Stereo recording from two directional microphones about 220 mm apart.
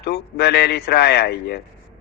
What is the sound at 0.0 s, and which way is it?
A man's voice, 45° left (ahead or behind).